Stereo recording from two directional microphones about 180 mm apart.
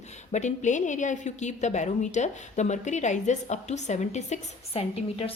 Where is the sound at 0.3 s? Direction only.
40° left (ahead or behind).